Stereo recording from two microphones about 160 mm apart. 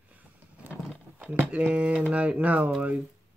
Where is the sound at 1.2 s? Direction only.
10° right (ahead or behind).